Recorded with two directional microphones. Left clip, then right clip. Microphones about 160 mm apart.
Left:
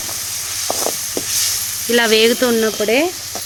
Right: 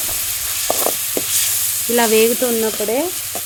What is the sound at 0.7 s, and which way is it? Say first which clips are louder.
Snake: right 1 dB; 20° right (ahead or behind).